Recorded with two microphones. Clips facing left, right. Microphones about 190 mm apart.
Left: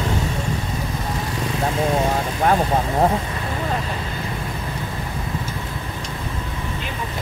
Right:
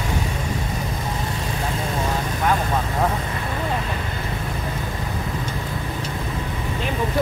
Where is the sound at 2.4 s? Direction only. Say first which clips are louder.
Left 4 dB; 40° left (ahead or behind).